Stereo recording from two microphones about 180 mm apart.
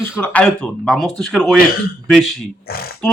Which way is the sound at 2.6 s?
55° left (ahead or behind).